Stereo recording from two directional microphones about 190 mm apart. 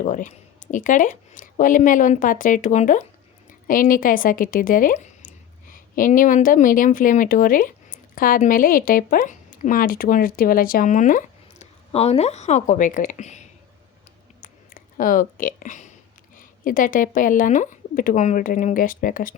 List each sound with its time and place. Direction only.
0.0 s speech: 40° left (ahead or behind)
14.4 s a sound: 45° left (ahead or behind)
16.4 s speech: 45° left (ahead or behind)